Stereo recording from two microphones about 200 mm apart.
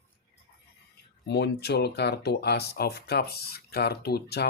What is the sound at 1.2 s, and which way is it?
Speech, 55° left (ahead or behind).